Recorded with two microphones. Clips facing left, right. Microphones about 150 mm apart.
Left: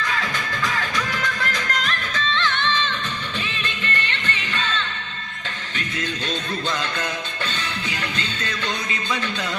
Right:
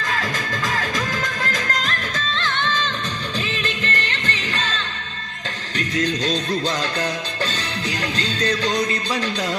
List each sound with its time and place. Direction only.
0.0 s music: 40° right (ahead or behind)